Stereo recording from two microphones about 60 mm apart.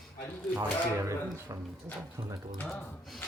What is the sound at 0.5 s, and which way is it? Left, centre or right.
Speech, right.